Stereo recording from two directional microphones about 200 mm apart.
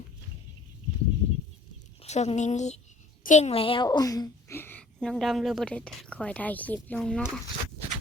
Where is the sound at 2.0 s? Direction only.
35° left (ahead or behind); by 7.3 s 5° left (ahead or behind).